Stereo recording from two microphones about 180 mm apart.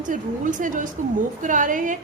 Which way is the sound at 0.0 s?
45° right (ahead or behind).